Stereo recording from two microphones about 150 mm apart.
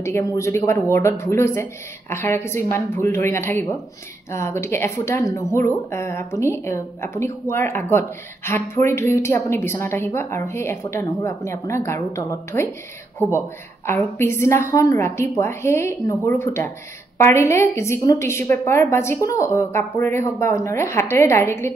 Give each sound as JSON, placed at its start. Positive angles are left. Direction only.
{"t": 0.0, "sound": "a woman's voice", "side_deg": 20}
{"t": 13.8, "sound": "a woman's voice", "side_deg": 15}